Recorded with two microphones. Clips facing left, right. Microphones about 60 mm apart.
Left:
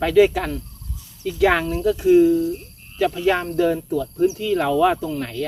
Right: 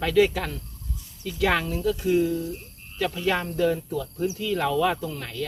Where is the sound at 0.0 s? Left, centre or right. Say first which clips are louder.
Left 5 dB; centre.